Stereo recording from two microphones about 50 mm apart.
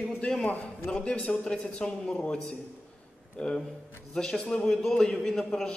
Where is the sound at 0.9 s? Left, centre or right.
Left.